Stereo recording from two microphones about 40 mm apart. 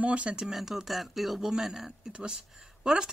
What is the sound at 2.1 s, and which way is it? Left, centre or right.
Speech, right.